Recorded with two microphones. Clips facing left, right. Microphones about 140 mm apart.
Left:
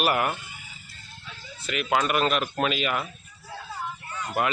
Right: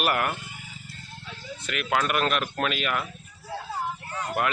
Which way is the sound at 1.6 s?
Centre (ahead or behind).